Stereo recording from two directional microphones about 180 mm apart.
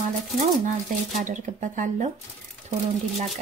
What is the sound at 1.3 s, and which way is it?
Speech, 45° right (ahead or behind).